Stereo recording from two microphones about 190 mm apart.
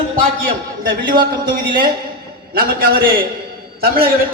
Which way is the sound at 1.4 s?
50° right (ahead or behind).